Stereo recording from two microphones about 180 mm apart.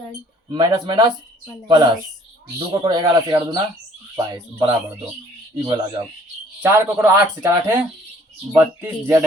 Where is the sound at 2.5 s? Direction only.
25° right (ahead or behind).